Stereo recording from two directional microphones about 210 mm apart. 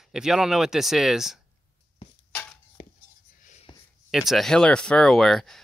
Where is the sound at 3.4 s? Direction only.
35° left (ahead or behind).